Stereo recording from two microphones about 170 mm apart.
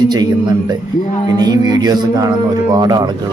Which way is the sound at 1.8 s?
25° right (ahead or behind).